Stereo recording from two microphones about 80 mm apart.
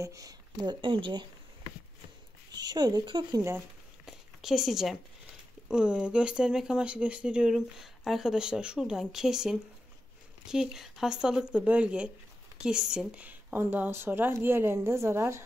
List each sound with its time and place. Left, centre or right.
0.0 s speech: right
0.6 s speech: right
2.5 s speech: right
4.0 s a sound: centre
5.7 s a woman's voice: centre
7.5 s a woman's voice: centre; by 15.4 s right